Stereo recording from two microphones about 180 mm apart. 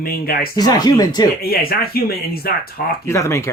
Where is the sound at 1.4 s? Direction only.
55° left (ahead or behind).